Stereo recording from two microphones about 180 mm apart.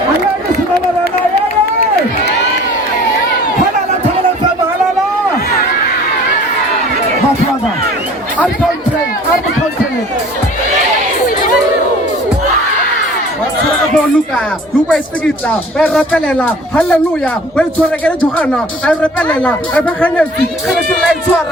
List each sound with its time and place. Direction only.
15.4 s speech: 5° left (ahead or behind)
19.5 s speech: 5° left (ahead or behind)